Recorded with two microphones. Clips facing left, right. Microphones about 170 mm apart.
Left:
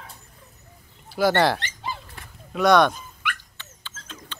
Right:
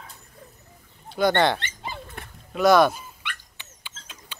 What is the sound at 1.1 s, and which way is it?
Speech, 5° left (ahead or behind).